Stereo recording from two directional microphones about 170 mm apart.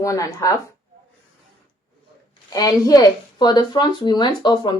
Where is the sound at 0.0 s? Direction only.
20° left (ahead or behind).